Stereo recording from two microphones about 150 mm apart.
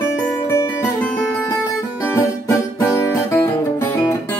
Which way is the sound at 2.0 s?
20° left (ahead or behind).